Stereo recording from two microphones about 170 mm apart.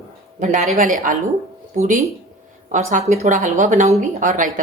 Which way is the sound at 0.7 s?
45° right (ahead or behind).